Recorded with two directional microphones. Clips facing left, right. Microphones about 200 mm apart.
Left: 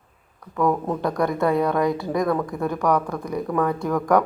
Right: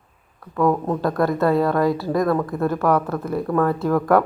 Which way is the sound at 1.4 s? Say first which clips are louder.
Right 2 dB; 20° left (ahead or behind).